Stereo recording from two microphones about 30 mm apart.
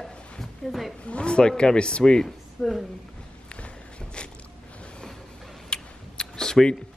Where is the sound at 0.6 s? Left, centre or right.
Centre.